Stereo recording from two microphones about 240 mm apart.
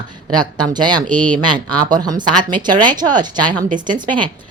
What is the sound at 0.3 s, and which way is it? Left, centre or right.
Speech, centre.